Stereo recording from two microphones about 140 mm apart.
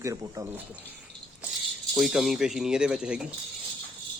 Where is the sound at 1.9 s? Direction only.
Centre (ahead or behind).